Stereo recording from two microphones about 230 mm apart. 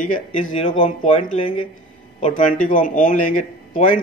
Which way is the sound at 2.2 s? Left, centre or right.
Left.